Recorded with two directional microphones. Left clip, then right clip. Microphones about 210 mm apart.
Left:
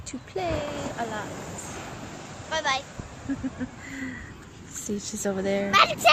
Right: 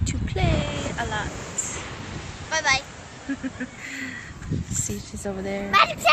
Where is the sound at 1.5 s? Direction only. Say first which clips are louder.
Right 5 dB; 45° left (ahead or behind).